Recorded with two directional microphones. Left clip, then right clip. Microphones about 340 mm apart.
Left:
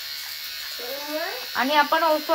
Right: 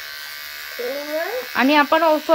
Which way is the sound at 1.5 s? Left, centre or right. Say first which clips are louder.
Right 4 dB; right.